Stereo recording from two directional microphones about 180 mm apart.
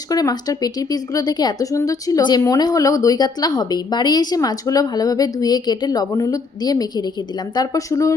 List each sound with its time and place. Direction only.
0.1 s speech: 20° left (ahead or behind)